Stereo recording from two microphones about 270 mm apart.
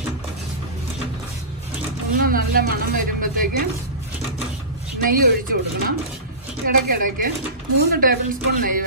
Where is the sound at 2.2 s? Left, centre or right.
Right.